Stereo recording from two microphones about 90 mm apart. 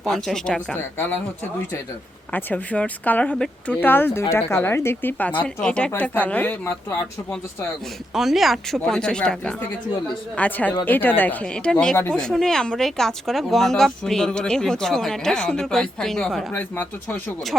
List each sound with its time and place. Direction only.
0.0 s speech: centre (ahead or behind)
0.8 s speech: 25° left (ahead or behind)
2.3 s a woman's voice: 15° left (ahead or behind)
3.8 s a woman's voice: 20° left (ahead or behind)
8.1 s a woman's voice: 5° right (ahead or behind)
16.5 s speech: 20° left (ahead or behind)
17.5 s speech: 10° right (ahead or behind)